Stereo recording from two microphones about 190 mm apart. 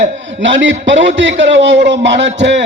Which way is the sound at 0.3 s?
75° right (ahead or behind).